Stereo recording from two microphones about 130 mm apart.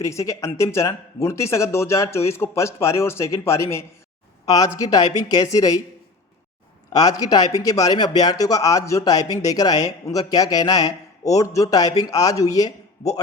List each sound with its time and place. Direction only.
0.0 s a man's voice: 25° left (ahead or behind)
6.9 s a man's voice: 30° left (ahead or behind)